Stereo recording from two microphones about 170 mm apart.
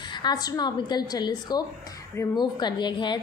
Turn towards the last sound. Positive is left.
turn(degrees=25)  # may be behind; listen again after turning